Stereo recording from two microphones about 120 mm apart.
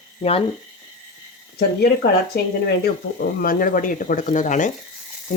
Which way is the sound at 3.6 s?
90° left.